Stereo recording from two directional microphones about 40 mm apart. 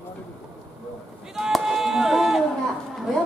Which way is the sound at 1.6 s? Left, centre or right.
Centre.